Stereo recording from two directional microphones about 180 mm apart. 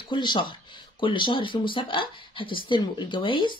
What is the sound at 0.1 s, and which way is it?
Speech, 25° left (ahead or behind).